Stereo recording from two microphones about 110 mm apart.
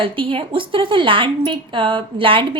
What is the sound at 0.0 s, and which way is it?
A woman's voice, 55° right (ahead or behind).